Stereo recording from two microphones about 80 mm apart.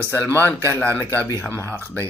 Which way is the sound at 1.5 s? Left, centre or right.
Left.